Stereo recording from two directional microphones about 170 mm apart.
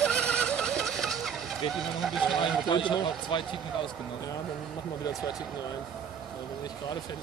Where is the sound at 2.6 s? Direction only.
30° left (ahead or behind).